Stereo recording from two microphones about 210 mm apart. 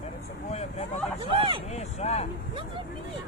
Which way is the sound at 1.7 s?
30° left (ahead or behind).